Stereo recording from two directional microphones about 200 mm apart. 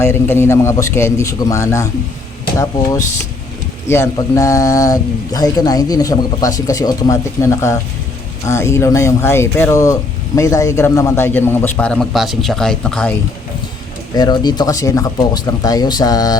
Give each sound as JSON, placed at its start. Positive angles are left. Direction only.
{"t": 0.0, "sound": "speech", "side_deg": 10}
{"t": 3.8, "sound": "speech", "side_deg": 10}
{"t": 14.2, "sound": "speech", "side_deg": 20}